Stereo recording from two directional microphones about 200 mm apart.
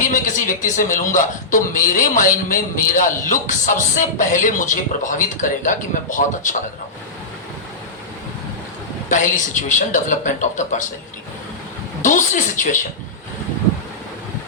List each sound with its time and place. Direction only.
0.0 s a man's voice: 40° left (ahead or behind)
9.0 s a man's voice: 40° left (ahead or behind)
12.0 s a man's voice: 40° left (ahead or behind)